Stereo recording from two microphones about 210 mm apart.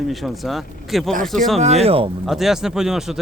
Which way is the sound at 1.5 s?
30° right (ahead or behind).